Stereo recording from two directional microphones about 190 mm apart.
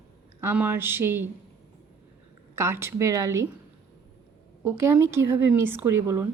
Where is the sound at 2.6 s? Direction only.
15° right (ahead or behind).